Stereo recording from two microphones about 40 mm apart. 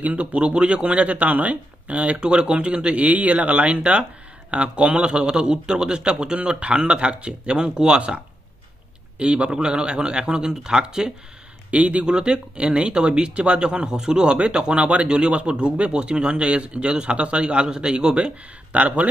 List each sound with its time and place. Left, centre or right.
0.0 s speech: right
2.1 s speech: right
9.2 s speech: right
11.7 s speech: right